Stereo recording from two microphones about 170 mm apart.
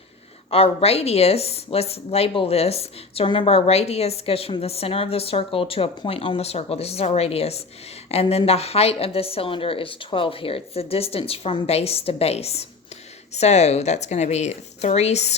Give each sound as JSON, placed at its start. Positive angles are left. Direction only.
{"t": 0.5, "sound": "speech", "side_deg": 35}